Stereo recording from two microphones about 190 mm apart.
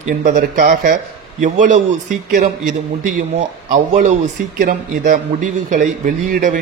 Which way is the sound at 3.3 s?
40° right (ahead or behind).